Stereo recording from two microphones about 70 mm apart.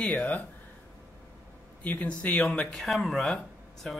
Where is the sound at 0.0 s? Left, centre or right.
Centre.